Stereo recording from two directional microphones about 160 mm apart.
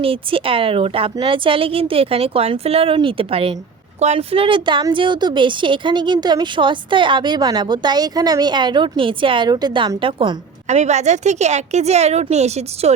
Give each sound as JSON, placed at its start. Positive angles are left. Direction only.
{"t": 0.0, "sound": "a woman's voice", "side_deg": -35}